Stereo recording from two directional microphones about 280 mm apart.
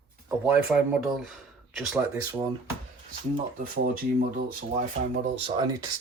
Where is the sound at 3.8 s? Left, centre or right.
Right.